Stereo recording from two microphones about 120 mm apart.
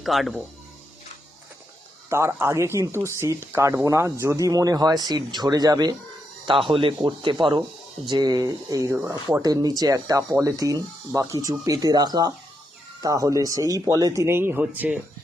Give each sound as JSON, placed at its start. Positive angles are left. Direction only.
{"t": 0.0, "sound": "speech", "side_deg": 0}
{"t": 2.0, "sound": "speech", "side_deg": -25}
{"t": 6.4, "sound": "speech", "side_deg": -45}